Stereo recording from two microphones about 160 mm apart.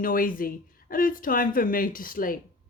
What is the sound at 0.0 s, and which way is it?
A woman's voice, 60° left (ahead or behind).